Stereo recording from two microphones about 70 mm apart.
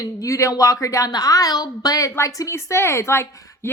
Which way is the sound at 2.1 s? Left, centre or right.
Left.